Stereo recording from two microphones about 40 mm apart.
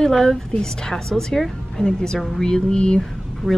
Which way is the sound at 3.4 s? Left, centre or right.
Centre.